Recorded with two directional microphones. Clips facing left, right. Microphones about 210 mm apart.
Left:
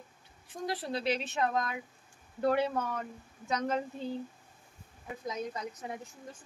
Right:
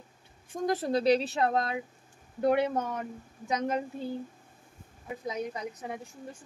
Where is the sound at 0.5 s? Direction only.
45° right (ahead or behind); by 1.8 s 30° right (ahead or behind).